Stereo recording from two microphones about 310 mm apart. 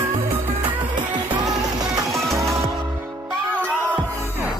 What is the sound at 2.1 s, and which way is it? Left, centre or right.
Music, centre.